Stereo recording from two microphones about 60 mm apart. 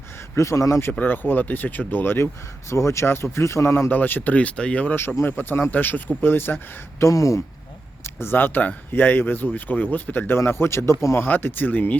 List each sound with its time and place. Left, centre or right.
0.3 s speech: left
0.9 s speech: left
5.2 s speech: left
5.7 s speech: left
7.0 s speech: left
8.0 s speech: left
11.3 s speech: left